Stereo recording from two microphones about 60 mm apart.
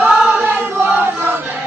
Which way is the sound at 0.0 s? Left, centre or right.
Right.